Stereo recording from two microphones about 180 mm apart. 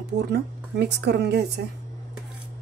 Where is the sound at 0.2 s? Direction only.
65° right (ahead or behind).